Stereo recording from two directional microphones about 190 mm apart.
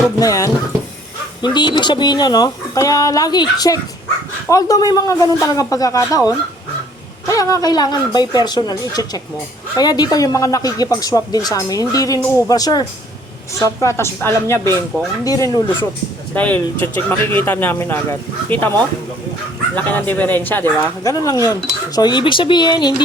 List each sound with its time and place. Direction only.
0.2 s speech: 20° left (ahead or behind)
19.7 s speech: 10° left (ahead or behind)